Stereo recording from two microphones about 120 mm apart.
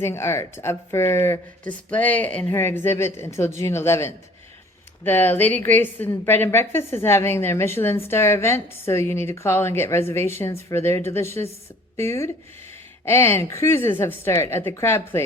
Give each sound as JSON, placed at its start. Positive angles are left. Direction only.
{"t": 0.0, "sound": "a woman's voice", "side_deg": 20}